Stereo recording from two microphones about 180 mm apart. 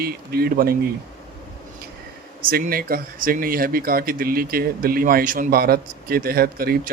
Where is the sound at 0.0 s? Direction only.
60° right (ahead or behind).